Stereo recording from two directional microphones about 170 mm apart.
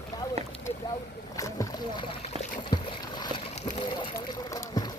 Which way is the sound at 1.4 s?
20° left (ahead or behind).